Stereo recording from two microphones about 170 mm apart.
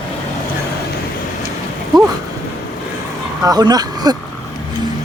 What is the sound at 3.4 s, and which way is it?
Speech, 25° right (ahead or behind).